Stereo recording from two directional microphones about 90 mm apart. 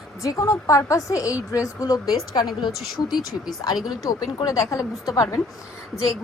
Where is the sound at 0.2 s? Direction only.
35° left (ahead or behind); by 2.7 s 55° left (ahead or behind).